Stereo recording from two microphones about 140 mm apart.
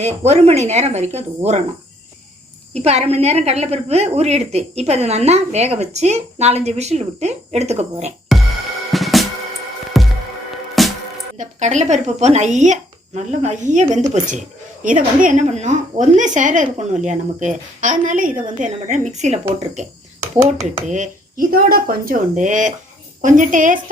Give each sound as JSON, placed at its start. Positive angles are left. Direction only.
{"t": 0.3, "sound": "a woman's voice", "side_deg": -50}
{"t": 2.7, "sound": "a woman's voice", "side_deg": -50}
{"t": 8.9, "sound": "music", "side_deg": 0}
{"t": 11.3, "sound": "speech", "side_deg": -60}
{"t": 14.8, "sound": "speech", "side_deg": -70}
{"t": 20.8, "sound": "speech", "side_deg": -60}